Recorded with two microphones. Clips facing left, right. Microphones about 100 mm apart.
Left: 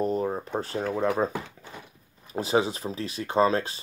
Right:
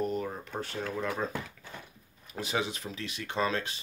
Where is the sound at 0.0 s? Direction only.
35° left (ahead or behind).